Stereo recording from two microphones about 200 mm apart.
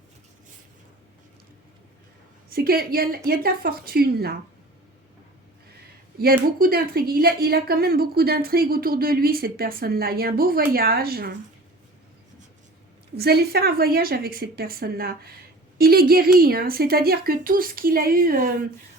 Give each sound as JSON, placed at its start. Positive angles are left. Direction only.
{"t": 2.5, "sound": "speech", "side_deg": -50}
{"t": 6.1, "sound": "speech", "side_deg": -45}
{"t": 13.1, "sound": "speech", "side_deg": -50}